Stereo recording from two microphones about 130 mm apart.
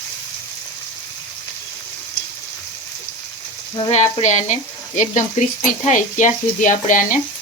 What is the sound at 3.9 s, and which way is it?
Frying, 60° left (ahead or behind).